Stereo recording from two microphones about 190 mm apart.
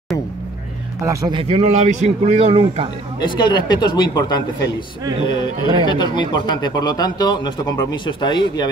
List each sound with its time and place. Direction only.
1.0 s a man's voice: 25° right (ahead or behind)
3.2 s speech: 25° left (ahead or behind)